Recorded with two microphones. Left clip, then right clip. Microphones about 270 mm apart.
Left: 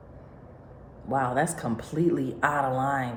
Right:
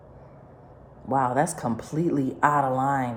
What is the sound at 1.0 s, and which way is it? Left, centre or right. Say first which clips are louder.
A woman's voice: right 3 dB; right.